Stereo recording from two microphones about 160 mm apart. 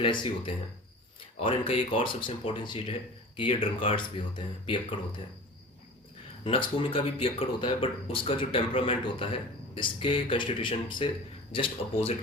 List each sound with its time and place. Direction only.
0.0 s speech: 30° left (ahead or behind)
6.4 s speech: 35° left (ahead or behind)